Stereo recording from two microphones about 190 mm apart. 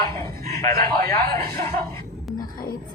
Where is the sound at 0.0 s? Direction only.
15° left (ahead or behind).